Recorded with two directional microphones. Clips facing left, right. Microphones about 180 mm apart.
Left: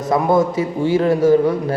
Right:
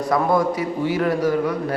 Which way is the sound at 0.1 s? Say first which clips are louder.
Left 4 dB; 25° left (ahead or behind).